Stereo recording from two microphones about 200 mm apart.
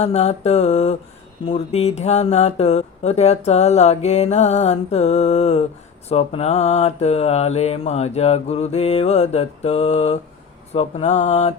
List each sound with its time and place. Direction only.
0.0 s speech: 30° left (ahead or behind)